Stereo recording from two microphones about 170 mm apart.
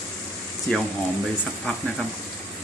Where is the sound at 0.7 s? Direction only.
5° left (ahead or behind).